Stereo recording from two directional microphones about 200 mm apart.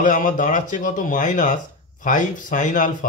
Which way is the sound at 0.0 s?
40° left (ahead or behind).